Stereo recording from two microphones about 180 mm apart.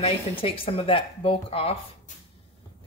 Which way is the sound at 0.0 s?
30° left (ahead or behind).